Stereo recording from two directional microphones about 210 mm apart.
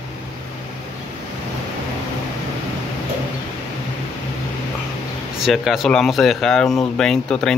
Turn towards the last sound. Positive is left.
turn(degrees=5)  # may be behind; listen again after turning